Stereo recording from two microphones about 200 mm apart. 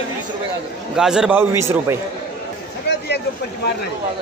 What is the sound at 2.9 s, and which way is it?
Vehicle, 55° left (ahead or behind).